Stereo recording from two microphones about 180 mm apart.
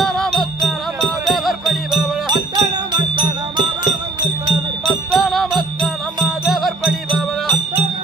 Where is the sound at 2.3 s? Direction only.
25° right (ahead or behind).